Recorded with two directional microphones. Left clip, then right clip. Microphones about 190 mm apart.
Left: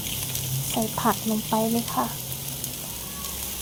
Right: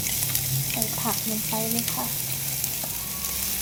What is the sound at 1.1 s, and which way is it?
Frying, 35° left (ahead or behind).